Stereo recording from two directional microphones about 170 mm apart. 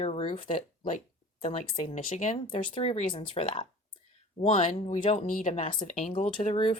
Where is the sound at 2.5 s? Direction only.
30° left (ahead or behind).